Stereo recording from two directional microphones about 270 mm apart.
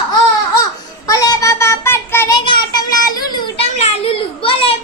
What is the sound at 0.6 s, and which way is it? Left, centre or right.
Child singing, centre.